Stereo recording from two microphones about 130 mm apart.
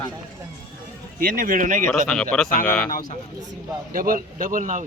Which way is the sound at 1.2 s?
90° right.